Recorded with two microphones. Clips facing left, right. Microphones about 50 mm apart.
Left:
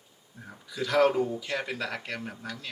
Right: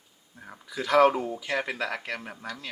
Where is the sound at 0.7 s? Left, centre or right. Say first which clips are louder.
Right 3 dB; centre.